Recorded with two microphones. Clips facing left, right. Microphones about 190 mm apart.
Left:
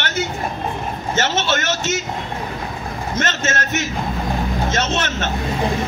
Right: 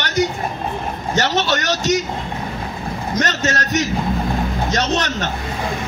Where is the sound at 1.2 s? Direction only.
35° right (ahead or behind).